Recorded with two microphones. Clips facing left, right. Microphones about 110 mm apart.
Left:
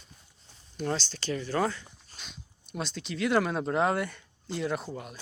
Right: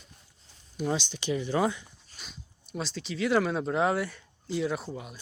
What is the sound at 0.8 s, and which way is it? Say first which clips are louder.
Speech: right 2 dB; 10° right (ahead or behind).